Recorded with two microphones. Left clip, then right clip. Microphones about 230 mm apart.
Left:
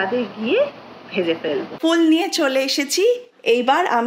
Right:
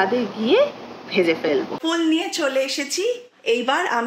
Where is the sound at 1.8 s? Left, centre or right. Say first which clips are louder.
Left 8 dB; left.